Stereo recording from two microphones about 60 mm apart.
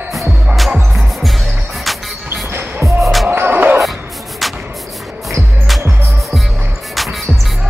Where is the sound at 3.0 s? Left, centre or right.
Centre.